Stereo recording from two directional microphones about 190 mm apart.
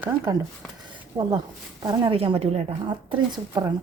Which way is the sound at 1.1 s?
30° right (ahead or behind).